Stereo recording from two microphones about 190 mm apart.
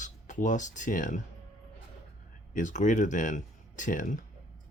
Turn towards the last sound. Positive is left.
turn(degrees=45)  # may be behind; listen again after turning